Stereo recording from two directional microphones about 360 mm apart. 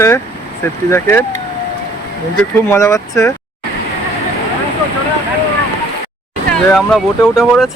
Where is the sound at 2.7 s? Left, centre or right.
Centre.